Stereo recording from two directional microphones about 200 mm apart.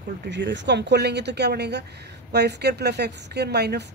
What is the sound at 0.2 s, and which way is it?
A woman's voice, 60° right (ahead or behind).